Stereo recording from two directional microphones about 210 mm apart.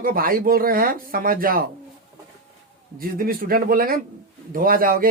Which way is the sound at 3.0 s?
45° right (ahead or behind).